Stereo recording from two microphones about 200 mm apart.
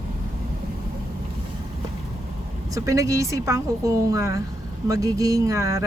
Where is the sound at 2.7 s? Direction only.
15° right (ahead or behind).